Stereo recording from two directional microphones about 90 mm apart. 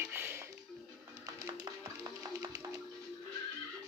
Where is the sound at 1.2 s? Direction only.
40° right (ahead or behind).